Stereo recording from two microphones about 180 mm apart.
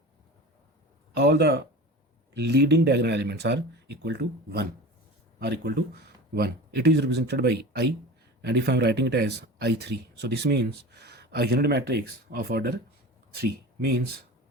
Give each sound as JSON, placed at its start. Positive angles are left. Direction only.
{"t": 1.1, "sound": "speech", "side_deg": -65}